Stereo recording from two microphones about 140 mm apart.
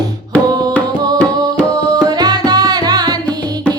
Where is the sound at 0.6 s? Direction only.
25° right (ahead or behind).